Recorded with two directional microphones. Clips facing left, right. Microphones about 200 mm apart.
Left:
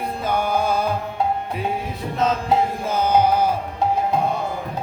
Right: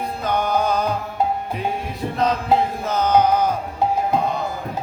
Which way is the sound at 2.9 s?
10° left (ahead or behind).